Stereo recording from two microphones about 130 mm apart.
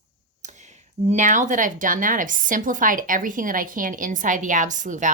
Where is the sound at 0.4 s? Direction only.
65° right (ahead or behind).